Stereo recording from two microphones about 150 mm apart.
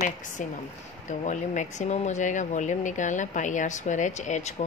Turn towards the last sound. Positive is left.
turn(degrees=50)  # may be behind; listen again after turning